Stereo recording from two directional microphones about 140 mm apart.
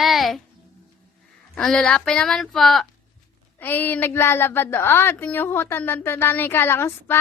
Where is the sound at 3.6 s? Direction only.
15° left (ahead or behind).